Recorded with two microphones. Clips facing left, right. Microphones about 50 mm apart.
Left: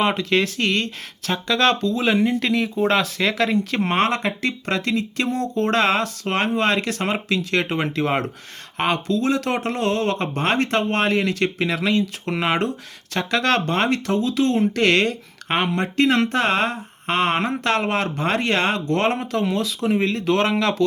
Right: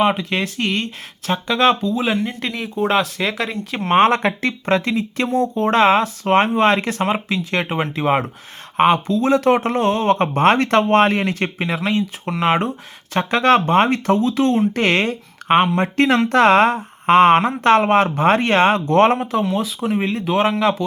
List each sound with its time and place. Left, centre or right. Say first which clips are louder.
0.0 s speech: right 1 dB; centre
3.9 s speech: right 9 dB; right
4.6 s speech: right 6 dB; right
7.0 s speech: right 3 dB; centre; by 11.2 s right
11.2 s speech: even; right
11.5 s speech: even; centre
13.1 s speech: right 5 dB; right
15.8 s speech: right 2 dB; right
19.5 s speech: even; centre